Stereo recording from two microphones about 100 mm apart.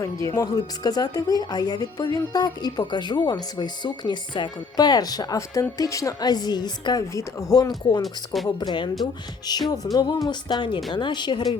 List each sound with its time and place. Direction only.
0.0 s a woman's voice: 35° left (ahead or behind)
7.1 s a woman's voice: 30° left (ahead or behind)
8.0 s speech: centre (ahead or behind)
8.4 s speech: 45° left (ahead or behind)